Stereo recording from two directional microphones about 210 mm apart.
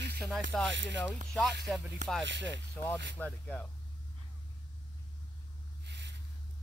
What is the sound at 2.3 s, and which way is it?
Speech, 60° right (ahead or behind).